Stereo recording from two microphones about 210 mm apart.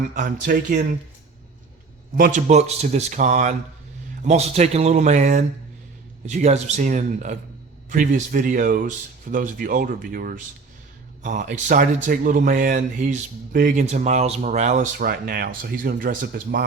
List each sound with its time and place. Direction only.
0.1 s a man's voice: 40° right (ahead or behind)
2.1 s a man's voice: 40° right (ahead or behind)